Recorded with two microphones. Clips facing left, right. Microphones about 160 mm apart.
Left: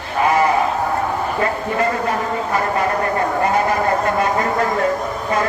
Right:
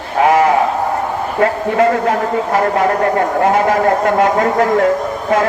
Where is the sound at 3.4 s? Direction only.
90° right.